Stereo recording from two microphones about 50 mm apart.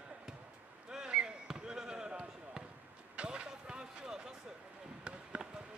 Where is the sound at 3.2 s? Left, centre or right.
Centre.